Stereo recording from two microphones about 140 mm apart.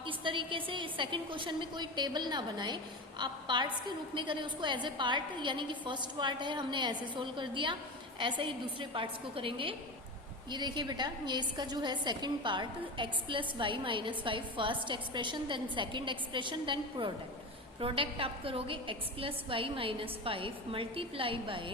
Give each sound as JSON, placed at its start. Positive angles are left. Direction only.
{"t": 0.0, "sound": "a woman's voice", "side_deg": -35}